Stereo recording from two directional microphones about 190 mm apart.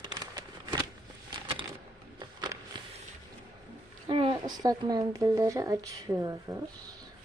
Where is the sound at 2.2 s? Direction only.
20° right (ahead or behind).